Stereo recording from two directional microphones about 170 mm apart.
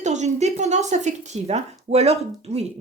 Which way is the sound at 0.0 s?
45° right (ahead or behind).